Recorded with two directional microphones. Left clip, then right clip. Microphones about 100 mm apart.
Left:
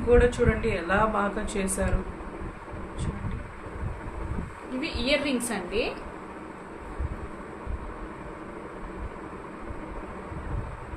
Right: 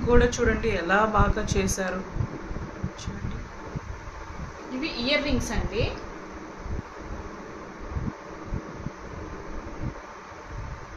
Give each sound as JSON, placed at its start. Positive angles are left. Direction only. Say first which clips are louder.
{"t": 0.1, "sound": "a man's voice", "louder": "left 1 dB", "side_deg": -55}
{"t": 4.7, "sound": "a woman's voice", "louder": "right 1 dB", "side_deg": 40}